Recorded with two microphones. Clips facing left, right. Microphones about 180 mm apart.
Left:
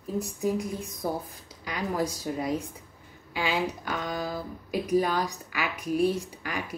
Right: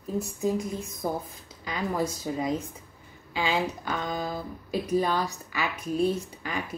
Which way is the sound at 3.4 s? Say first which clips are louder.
Right 1 dB; 10° left (ahead or behind).